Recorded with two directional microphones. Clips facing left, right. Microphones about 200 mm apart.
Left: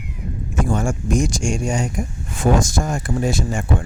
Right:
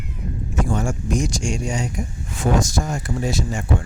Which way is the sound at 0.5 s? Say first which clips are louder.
Left 2 dB; 50° left (ahead or behind).